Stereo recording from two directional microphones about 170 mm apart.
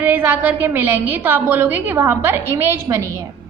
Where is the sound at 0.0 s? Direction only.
10° right (ahead or behind).